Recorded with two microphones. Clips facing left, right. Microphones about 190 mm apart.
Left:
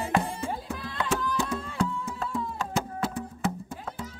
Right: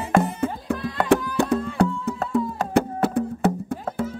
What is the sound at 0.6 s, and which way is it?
Music, 65° right (ahead or behind).